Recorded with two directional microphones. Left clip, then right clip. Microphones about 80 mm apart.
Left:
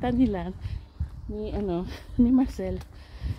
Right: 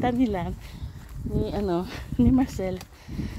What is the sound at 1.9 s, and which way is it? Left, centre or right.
Speech, left.